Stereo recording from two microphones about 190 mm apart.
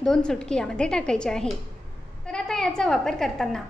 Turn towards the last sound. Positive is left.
turn(degrees=0)  # may be behind; listen again after turning